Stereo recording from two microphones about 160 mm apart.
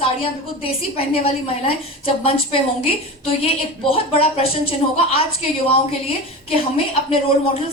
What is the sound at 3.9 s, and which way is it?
Speech, 35° left (ahead or behind).